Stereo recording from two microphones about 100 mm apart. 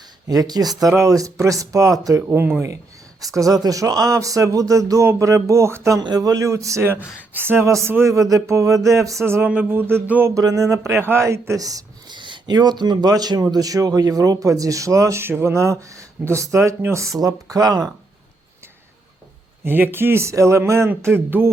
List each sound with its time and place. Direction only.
0.3 s speech: 40° right (ahead or behind); by 2.7 s 25° right (ahead or behind)
3.2 s speech: 35° right (ahead or behind)
6.0 s speech: 40° right (ahead or behind); by 10.3 s 20° right (ahead or behind)
10.3 s speech: 35° right (ahead or behind)
19.6 s speech: 20° right (ahead or behind)